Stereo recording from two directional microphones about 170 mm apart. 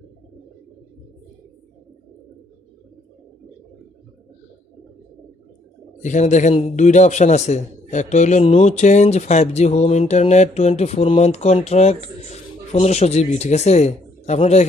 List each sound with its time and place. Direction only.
6.0 s a man's voice: 45° left (ahead or behind)